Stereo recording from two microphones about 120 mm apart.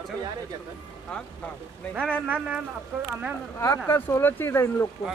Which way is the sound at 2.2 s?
10° right (ahead or behind).